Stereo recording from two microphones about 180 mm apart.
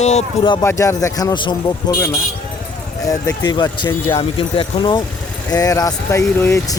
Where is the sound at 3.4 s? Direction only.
25° left (ahead or behind).